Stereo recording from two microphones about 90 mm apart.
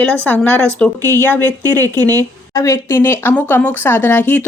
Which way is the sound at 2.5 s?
35° left (ahead or behind).